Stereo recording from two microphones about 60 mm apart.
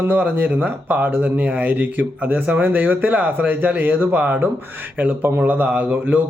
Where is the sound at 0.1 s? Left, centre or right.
Right.